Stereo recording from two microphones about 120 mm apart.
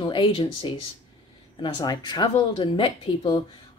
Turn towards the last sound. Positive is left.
turn(degrees=45)  # may be behind; listen again after turning